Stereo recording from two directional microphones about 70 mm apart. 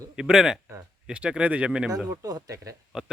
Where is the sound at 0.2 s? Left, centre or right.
Centre.